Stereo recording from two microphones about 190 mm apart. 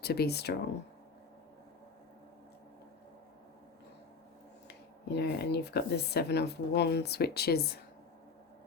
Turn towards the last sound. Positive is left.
turn(degrees=55)  # may be behind; listen again after turning